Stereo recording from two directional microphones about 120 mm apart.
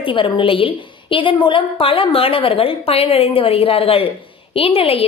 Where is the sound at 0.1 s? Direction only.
45° left (ahead or behind).